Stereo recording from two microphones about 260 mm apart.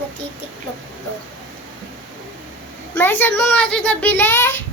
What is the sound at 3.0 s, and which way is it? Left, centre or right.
A child's voice, centre.